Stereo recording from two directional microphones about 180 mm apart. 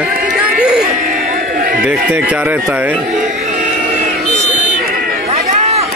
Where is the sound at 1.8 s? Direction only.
10° right (ahead or behind).